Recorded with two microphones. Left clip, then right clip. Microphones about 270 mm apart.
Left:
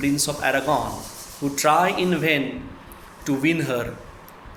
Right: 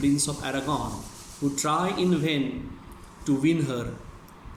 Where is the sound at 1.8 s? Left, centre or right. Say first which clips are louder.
Left 6 dB; centre.